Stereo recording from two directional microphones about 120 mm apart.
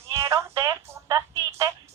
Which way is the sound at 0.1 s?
25° right (ahead or behind).